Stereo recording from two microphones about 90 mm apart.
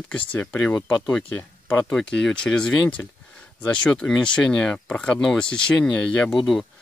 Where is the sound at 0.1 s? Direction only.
15° left (ahead or behind).